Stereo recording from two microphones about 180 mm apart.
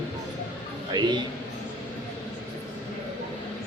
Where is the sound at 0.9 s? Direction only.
25° right (ahead or behind).